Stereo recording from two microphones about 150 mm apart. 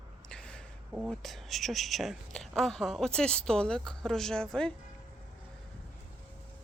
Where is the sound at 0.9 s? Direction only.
Centre (ahead or behind).